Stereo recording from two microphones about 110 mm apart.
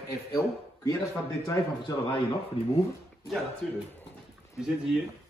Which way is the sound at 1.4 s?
35° left (ahead or behind).